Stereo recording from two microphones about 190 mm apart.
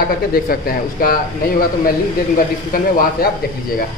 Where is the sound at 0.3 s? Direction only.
50° left (ahead or behind).